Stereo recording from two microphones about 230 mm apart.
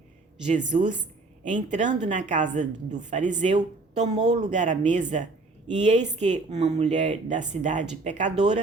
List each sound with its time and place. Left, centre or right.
0.4 s speech: right